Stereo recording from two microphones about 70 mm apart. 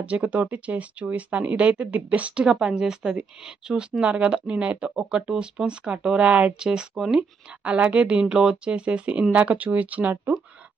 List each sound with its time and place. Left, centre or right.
0.0 s speech: centre